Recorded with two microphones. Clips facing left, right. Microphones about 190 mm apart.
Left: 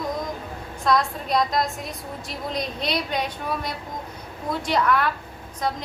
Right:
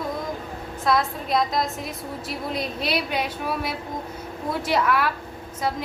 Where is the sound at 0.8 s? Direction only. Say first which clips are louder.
Left 1 dB; 5° right (ahead or behind).